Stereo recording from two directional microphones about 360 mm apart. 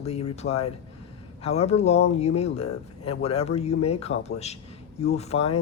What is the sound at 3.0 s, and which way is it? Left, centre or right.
Speech, centre.